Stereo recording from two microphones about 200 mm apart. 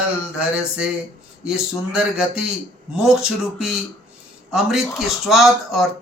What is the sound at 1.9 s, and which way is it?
Speech, 5° right (ahead or behind).